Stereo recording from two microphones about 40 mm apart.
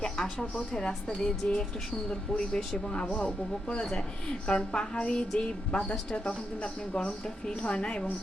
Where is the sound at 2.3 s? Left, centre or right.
Left.